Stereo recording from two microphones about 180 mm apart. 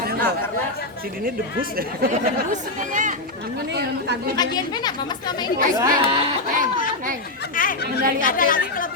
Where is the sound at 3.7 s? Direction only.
70° right (ahead or behind).